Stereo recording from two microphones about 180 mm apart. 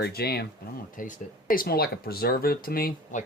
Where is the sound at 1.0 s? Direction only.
50° left (ahead or behind).